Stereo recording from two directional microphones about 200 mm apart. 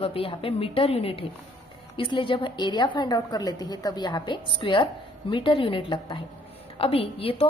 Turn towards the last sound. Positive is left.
turn(degrees=25)  # may be behind; listen again after turning